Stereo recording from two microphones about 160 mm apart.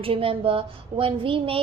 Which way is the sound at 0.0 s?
35° right (ahead or behind).